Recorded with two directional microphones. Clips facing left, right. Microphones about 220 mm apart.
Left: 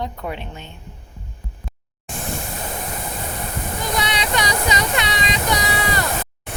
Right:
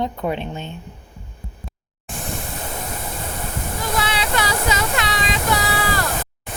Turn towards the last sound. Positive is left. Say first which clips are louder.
# even
turn(degrees=0)  # may be behind; listen again after turning